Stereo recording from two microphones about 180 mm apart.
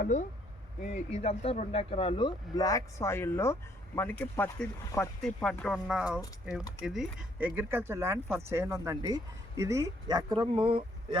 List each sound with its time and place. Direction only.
0.8 s speech: 35° left (ahead or behind); by 11.2 s 30° right (ahead or behind)